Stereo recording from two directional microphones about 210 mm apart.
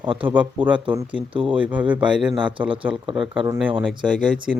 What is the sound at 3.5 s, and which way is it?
Speech, 10° right (ahead or behind).